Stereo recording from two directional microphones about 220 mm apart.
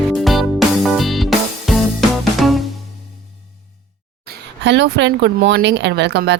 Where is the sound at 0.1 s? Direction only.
Centre (ahead or behind).